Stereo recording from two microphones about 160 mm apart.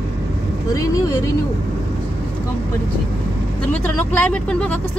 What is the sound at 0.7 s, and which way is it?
Speech, 20° left (ahead or behind).